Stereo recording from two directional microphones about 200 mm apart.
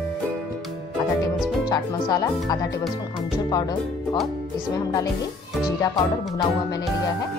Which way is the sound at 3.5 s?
20° left (ahead or behind).